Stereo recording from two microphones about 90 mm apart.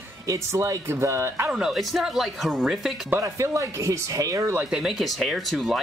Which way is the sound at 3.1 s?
30° right (ahead or behind).